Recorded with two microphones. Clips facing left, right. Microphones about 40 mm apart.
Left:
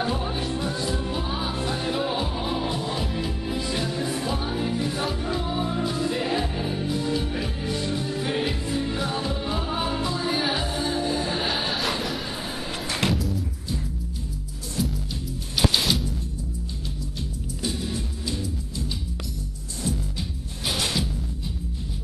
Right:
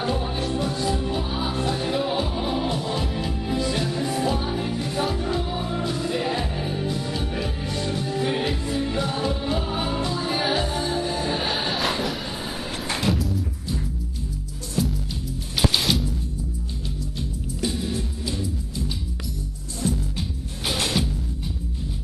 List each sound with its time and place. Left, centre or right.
0.0 s music: centre
14.8 s music: centre
17.6 s music: centre
19.8 s music: right